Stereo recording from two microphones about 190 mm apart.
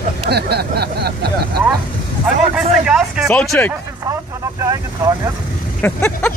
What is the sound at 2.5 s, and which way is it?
Speech, 5° right (ahead or behind).